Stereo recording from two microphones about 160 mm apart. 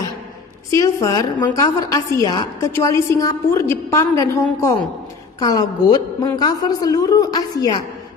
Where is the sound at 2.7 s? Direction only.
15° left (ahead or behind).